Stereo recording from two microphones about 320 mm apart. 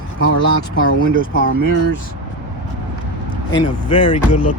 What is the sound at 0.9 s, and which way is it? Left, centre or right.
Speech, right.